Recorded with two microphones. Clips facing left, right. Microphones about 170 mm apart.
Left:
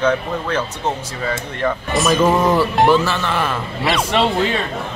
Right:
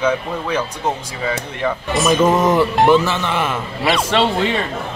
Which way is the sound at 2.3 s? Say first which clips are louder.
Right 1 dB; 20° right (ahead or behind).